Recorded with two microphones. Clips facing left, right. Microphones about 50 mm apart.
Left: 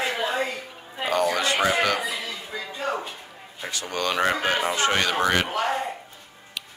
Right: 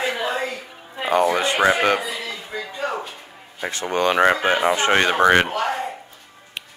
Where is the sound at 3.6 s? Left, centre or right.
Right.